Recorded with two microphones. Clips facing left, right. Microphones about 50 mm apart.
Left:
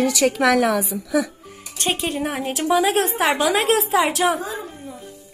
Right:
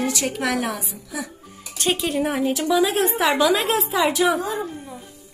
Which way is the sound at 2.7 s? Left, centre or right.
Left.